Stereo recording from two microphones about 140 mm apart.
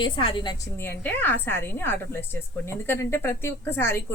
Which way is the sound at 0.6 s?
15° left (ahead or behind).